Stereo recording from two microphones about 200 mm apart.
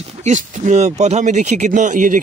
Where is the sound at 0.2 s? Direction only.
35° right (ahead or behind).